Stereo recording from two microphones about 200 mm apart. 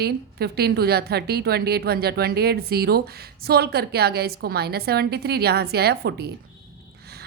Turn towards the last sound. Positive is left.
turn(degrees=-55)  # may be behind; listen again after turning